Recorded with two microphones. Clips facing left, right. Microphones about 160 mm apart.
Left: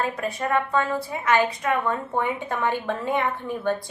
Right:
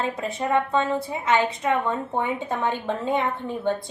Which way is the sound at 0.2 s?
25° right (ahead or behind).